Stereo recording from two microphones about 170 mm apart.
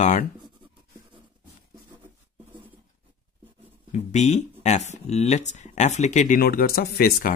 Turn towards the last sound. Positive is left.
turn(degrees=60)  # may be behind; listen again after turning